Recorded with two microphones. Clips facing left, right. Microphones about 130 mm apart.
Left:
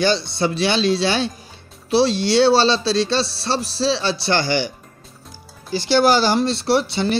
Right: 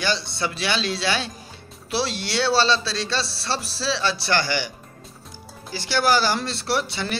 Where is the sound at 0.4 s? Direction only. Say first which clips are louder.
Left 7 dB; 25° left (ahead or behind).